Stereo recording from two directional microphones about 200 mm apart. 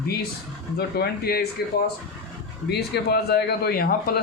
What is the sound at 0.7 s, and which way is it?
Speech, 55° left (ahead or behind).